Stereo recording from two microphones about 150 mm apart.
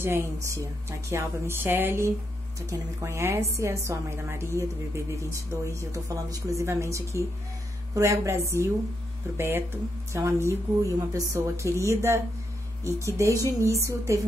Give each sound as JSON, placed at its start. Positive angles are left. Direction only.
{"t": 0.0, "sound": "a woman's voice", "side_deg": -15}